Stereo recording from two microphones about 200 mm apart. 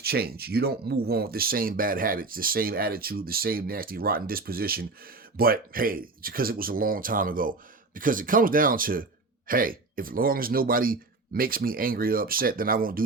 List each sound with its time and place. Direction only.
0.0 s speech: 50° right (ahead or behind)